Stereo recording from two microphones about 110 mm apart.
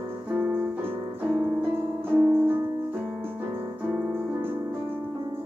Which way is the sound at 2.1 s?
20° right (ahead or behind).